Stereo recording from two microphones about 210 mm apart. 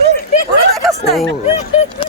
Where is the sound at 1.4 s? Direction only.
30° left (ahead or behind).